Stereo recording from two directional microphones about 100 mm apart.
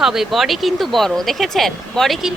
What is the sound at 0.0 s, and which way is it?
Speech, 5° right (ahead or behind).